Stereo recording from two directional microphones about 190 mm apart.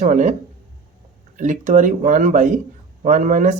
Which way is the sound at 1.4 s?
40° right (ahead or behind).